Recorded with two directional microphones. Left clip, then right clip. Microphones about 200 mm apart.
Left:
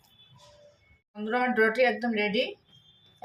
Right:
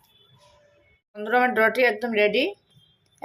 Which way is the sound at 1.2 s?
40° right (ahead or behind).